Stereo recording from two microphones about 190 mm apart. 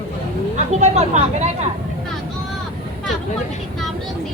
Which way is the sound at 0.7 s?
35° right (ahead or behind).